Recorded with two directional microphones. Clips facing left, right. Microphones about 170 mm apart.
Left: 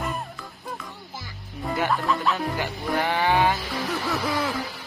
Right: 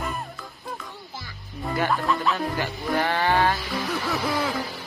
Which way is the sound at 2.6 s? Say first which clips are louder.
Right 2 dB; 15° left (ahead or behind).